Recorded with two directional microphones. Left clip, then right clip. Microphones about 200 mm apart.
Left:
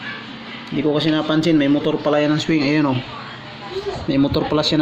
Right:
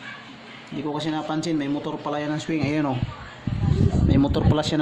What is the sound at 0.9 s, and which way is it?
Speech, 10° right (ahead or behind).